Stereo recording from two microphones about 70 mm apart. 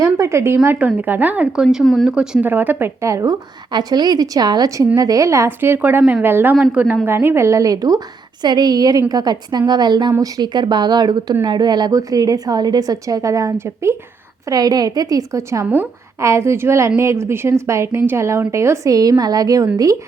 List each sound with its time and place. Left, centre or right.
0.0 s speech: right
0.8 s a woman's voice: right
1.6 s speech: centre
2.0 s speech: centre
2.4 s a woman's voice: right
3.0 s speech: right
3.2 s a woman's voice: right
4.9 s a woman's voice: right
5.5 s a woman's voice: right
10.1 s speech: right
11.9 s a woman's voice: right
14.5 s a woman's voice: right
18.9 s a woman's voice: right